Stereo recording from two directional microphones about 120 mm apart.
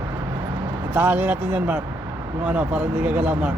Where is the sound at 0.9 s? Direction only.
15° right (ahead or behind).